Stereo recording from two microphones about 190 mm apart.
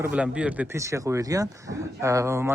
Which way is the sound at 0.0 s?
5° right (ahead or behind).